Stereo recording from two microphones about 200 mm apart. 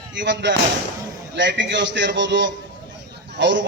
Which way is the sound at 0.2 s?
65° right (ahead or behind).